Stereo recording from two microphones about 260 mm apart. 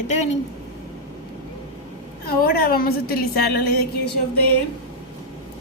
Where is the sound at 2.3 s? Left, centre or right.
Left.